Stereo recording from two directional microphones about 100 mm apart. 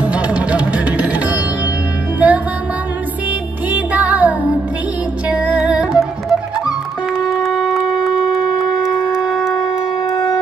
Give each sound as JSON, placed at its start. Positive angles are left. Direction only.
{"t": 0.0, "sound": "music", "side_deg": -10}
{"t": 3.7, "sound": "music", "side_deg": -15}
{"t": 7.2, "sound": "shofar", "side_deg": -5}